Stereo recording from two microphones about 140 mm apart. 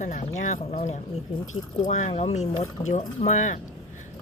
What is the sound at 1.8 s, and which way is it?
Speech, 65° left (ahead or behind).